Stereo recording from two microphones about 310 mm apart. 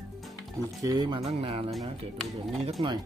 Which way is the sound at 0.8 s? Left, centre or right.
Centre.